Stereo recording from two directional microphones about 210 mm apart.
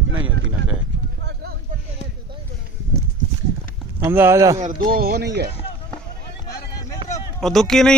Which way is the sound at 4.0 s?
10° right (ahead or behind).